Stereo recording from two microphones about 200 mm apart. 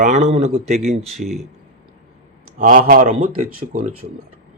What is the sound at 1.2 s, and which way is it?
Speech, centre (ahead or behind).